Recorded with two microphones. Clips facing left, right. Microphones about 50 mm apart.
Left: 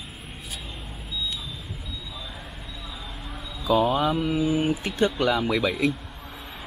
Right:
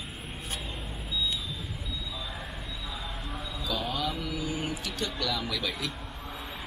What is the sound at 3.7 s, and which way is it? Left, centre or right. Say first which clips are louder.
Speech: left 11 dB; left.